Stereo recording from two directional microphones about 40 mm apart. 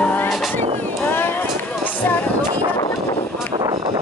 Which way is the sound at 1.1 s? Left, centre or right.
Left.